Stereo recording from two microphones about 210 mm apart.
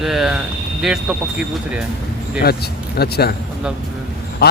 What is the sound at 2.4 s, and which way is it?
Speech, 50° left (ahead or behind).